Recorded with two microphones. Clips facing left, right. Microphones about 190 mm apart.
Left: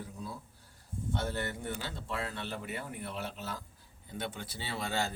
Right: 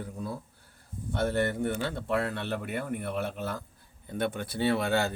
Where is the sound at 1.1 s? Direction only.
60° right (ahead or behind).